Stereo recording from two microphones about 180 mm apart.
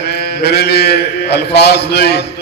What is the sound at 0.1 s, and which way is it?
A man's voice, 60° left (ahead or behind).